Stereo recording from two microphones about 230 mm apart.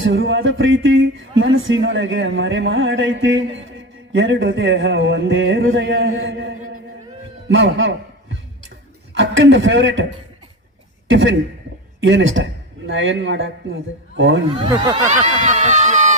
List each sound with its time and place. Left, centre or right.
0.0 s a man's voice: right
7.4 s a sound: right
9.1 s a man's voice: right
11.1 s a man's voice: right
14.6 s speech: centre
15.0 s speech: right